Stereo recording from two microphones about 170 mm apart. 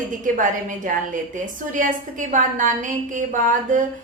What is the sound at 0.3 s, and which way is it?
Speech, 50° right (ahead or behind).